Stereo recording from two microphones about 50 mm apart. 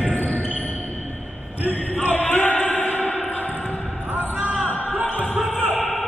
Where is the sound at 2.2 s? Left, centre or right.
Left.